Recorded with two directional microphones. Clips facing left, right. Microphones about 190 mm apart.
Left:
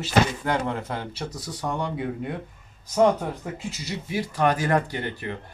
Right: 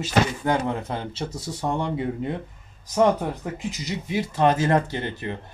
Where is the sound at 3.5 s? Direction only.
15° right (ahead or behind).